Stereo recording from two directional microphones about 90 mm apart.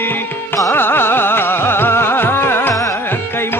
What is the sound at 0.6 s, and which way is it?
Carnatic music, 25° left (ahead or behind).